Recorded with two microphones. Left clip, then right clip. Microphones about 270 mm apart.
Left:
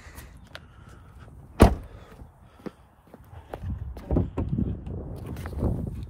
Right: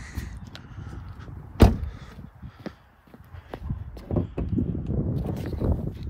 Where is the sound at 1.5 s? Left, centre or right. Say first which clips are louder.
Left 2 dB; left.